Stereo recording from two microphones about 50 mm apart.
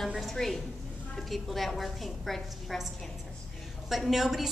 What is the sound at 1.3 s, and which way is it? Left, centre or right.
A woman's voice, centre.